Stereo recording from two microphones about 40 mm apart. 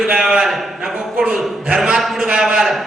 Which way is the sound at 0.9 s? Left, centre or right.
Centre.